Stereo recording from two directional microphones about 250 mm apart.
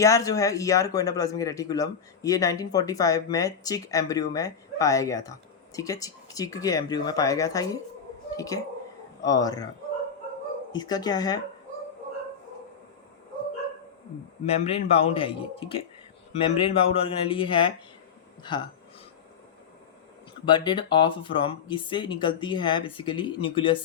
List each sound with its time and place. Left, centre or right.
0.0 s a woman's voice: centre
10.7 s speech: centre
14.4 s speech: left
20.4 s speech: centre